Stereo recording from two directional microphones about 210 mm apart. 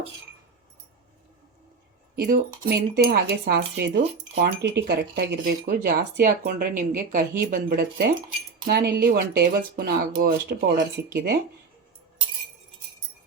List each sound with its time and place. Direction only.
2.1 s speech: 45° right (ahead or behind)